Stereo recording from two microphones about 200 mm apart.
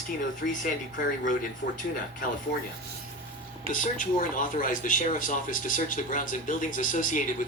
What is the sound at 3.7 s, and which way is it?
Speech, 40° left (ahead or behind).